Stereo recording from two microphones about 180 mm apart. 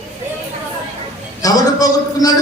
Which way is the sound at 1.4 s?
20° left (ahead or behind).